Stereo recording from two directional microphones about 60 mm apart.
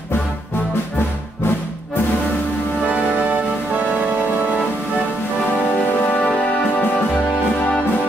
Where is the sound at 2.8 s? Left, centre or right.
Right.